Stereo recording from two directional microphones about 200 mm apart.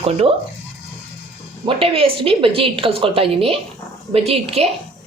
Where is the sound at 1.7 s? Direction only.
30° right (ahead or behind).